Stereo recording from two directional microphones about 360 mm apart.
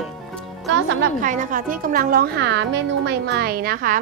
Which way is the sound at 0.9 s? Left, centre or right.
Right.